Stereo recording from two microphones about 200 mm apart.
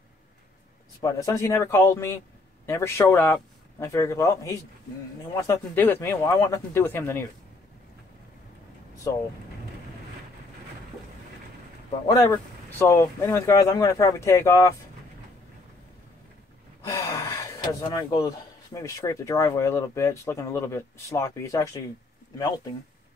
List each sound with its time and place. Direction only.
1.0 s speech: 15° left (ahead or behind)
12.1 s speech: 15° left (ahead or behind)
16.8 s speech: 15° left (ahead or behind)